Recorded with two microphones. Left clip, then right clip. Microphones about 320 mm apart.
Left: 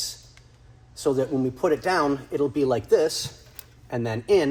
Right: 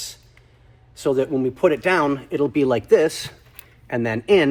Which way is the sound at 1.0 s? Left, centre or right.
Right.